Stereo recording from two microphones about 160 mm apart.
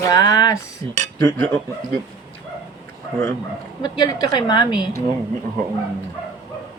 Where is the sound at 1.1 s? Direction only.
15° left (ahead or behind).